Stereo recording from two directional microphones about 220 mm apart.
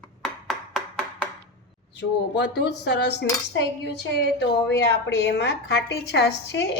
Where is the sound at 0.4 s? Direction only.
Centre (ahead or behind).